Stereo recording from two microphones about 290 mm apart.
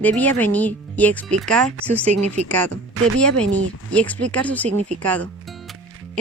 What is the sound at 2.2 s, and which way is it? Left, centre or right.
Speech, right.